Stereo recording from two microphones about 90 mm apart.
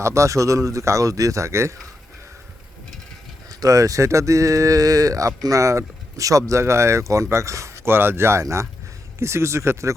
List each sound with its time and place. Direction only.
0.0 s speech: 35° right (ahead or behind)
3.5 s speech: 40° right (ahead or behind)